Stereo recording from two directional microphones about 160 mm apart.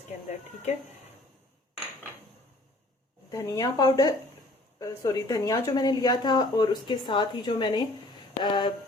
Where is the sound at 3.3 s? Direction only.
20° left (ahead or behind).